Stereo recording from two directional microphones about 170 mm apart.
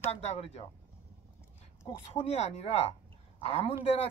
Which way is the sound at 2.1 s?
40° left (ahead or behind).